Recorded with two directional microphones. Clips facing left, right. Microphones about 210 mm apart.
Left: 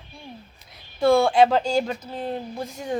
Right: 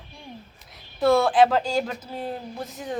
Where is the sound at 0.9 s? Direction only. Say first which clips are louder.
Left 1 dB; centre (ahead or behind).